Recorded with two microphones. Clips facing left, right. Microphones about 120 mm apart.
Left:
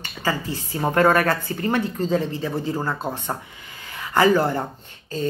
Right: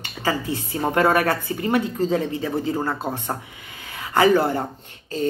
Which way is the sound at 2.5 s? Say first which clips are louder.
Right 2 dB; 25° right (ahead or behind).